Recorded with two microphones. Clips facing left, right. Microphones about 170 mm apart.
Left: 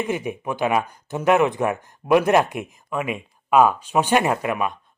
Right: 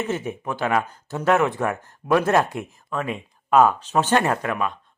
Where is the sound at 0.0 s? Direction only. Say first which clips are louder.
Left 1 dB; 15° left (ahead or behind).